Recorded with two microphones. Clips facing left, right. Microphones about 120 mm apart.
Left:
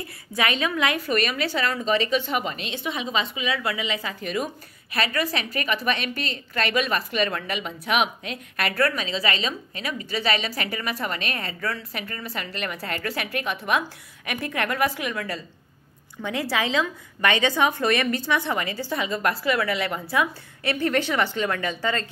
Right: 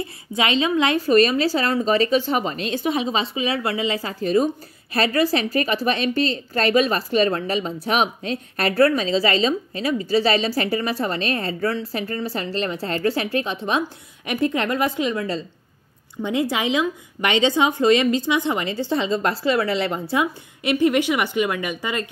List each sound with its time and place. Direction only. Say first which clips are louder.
0.0 s a woman's voice: right 3 dB; 25° right (ahead or behind)